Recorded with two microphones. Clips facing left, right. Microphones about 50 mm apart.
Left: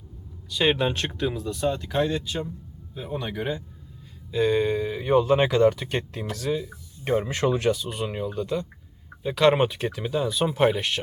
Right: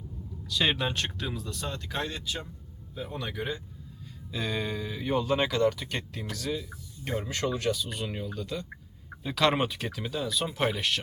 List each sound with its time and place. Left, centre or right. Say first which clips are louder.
0.5 s speech: left 5 dB; centre